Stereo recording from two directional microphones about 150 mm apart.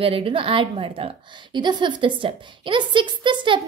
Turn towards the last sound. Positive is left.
turn(degrees=-30)  # may be behind; listen again after turning